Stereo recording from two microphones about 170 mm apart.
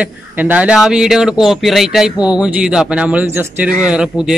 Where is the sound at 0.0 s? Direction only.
10° right (ahead or behind).